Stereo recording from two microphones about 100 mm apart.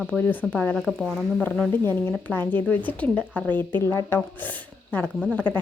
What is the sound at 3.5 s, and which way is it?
Speech, 50° right (ahead or behind).